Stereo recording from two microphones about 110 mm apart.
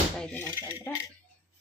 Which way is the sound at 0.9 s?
15° left (ahead or behind).